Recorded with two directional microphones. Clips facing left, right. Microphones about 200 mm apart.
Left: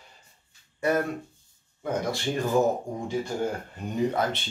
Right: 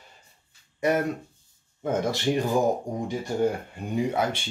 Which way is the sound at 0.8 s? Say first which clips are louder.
Right 1 dB; 15° right (ahead or behind).